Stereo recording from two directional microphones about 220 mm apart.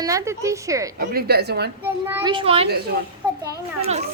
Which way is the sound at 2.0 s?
10° right (ahead or behind).